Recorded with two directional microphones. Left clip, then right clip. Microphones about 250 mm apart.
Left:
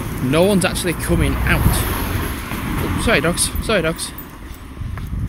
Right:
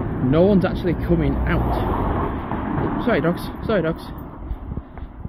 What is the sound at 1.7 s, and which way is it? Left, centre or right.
Vehicle, left.